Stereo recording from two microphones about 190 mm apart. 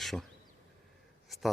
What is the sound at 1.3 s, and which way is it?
Speech, centre (ahead or behind).